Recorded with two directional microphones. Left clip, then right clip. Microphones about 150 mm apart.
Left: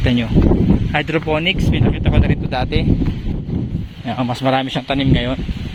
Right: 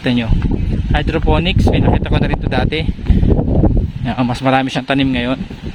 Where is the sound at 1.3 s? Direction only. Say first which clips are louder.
Right 5 dB; 35° right (ahead or behind).